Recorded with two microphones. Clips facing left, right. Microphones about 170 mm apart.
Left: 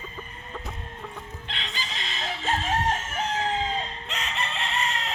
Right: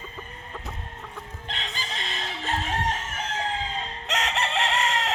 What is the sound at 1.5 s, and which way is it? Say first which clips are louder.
Chicken: right 3 dB; 45° right (ahead or behind).